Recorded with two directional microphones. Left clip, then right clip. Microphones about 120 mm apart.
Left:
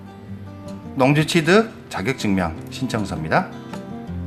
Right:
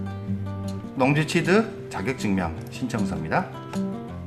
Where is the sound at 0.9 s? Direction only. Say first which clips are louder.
Left 5 dB; 30° left (ahead or behind).